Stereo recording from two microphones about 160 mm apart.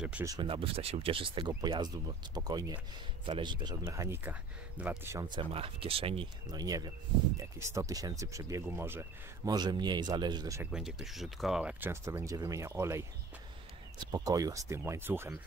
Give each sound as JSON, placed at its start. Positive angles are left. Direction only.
{"t": 0.2, "sound": "speech", "side_deg": -20}
{"t": 0.5, "sound": "speech", "side_deg": -35}
{"t": 5.2, "sound": "speech", "side_deg": -30}
{"t": 10.6, "sound": "speech", "side_deg": -5}